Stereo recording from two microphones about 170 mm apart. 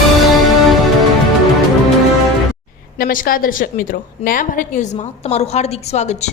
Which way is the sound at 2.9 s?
55° left (ahead or behind).